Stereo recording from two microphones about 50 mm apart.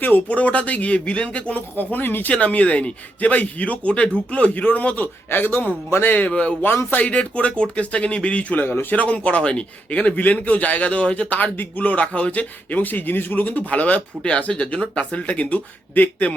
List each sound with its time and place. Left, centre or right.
0.3 s a man's voice: left
1.8 s a man's voice: left
2.3 s a man's voice: left
5.3 s a man's voice: left
5.9 s a man's voice: left
6.1 s a man's voice: left
8.6 s a man's voice: left
9.0 s a man's voice: left